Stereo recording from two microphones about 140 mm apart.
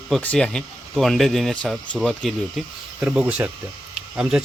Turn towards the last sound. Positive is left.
turn(degrees=-5)  # may be behind; listen again after turning